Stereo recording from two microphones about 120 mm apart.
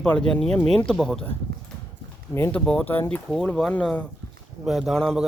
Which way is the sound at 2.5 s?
10° left (ahead or behind).